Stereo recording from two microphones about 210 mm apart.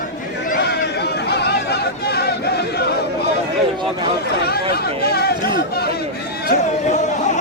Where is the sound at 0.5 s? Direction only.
50° left (ahead or behind).